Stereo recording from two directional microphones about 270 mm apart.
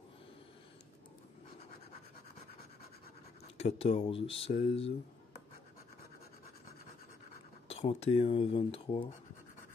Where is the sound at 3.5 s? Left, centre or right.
Left.